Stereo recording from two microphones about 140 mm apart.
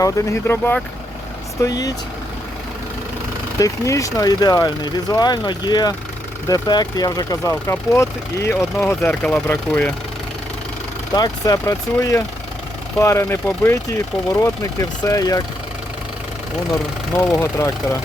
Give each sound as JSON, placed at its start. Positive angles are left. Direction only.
{"t": 0.0, "sound": "speech", "side_deg": 20}
{"t": 1.6, "sound": "speech", "side_deg": 25}
{"t": 3.6, "sound": "speech", "side_deg": 25}
{"t": 9.0, "sound": "speech", "side_deg": 5}
{"t": 11.1, "sound": "speech", "side_deg": 25}
{"t": 17.2, "sound": "speech", "side_deg": 15}